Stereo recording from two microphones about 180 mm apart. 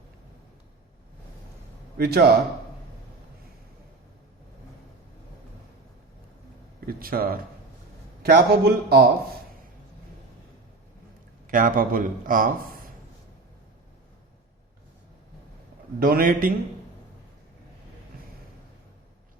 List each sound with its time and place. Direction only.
2.0 s speech: 60° right (ahead or behind)
6.8 s speech: 55° right (ahead or behind)
11.4 s a man's voice: 50° right (ahead or behind)
16.0 s a man's voice: 55° right (ahead or behind)